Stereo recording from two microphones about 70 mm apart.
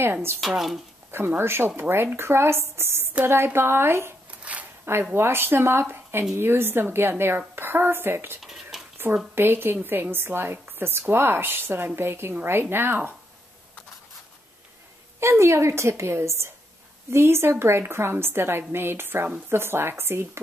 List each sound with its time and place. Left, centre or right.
0.0 s a woman's voice: right
0.4 s speech: centre
1.4 s a woman's voice: right
4.4 s a sound: centre
5.1 s a woman's voice: right
8.4 s a sound: centre
8.9 s a sound: right
9.3 s a woman's voice: right
15.1 s a woman's voice: right